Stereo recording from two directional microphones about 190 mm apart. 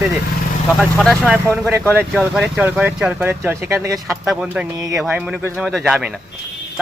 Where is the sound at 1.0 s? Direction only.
Centre (ahead or behind).